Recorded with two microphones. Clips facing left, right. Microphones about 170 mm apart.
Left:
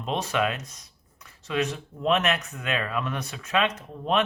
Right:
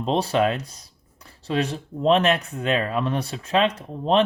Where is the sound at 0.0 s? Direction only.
30° right (ahead or behind).